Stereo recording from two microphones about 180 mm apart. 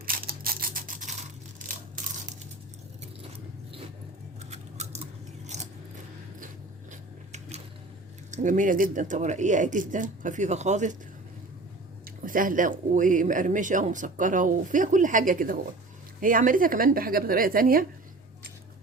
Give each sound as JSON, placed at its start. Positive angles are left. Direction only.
{"t": 0.0, "sound": "mechanisms", "side_deg": -55}
{"t": 4.4, "sound": "scissors", "side_deg": -35}
{"t": 5.5, "sound": "a sound", "side_deg": -40}
{"t": 6.9, "sound": "a sound", "side_deg": -40}
{"t": 8.3, "sound": "speech", "side_deg": -45}
{"t": 12.0, "sound": "speech", "side_deg": -50}